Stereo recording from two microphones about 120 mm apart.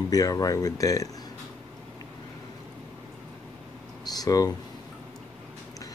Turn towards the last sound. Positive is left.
turn(degrees=30)  # may be behind; listen again after turning